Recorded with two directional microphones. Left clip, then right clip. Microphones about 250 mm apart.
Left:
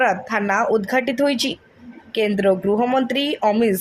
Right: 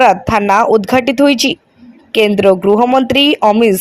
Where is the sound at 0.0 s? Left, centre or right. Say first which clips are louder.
Right 10 dB; right.